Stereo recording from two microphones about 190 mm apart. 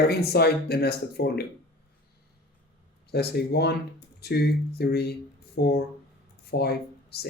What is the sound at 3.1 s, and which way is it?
Speech, 60° left (ahead or behind).